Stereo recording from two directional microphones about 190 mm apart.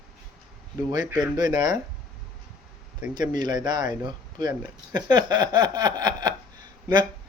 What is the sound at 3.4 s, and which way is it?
Speech, 20° right (ahead or behind).